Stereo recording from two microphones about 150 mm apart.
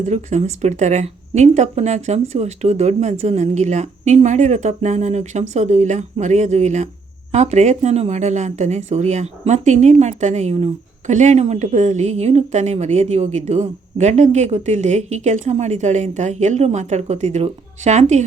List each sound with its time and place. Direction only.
0.0 s a woman's voice: 50° right (ahead or behind)